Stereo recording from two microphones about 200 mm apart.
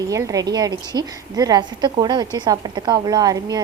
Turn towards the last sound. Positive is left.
turn(degrees=-20)  # may be behind; listen again after turning